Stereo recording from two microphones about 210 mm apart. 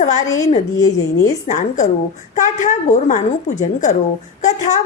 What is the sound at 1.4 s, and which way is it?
A woman's voice, 35° left (ahead or behind).